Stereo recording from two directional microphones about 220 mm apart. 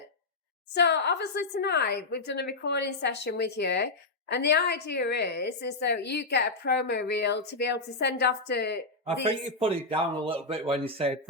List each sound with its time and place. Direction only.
0.7 s a woman's voice: 50° left (ahead or behind)
9.2 s a man's voice: 25° right (ahead or behind)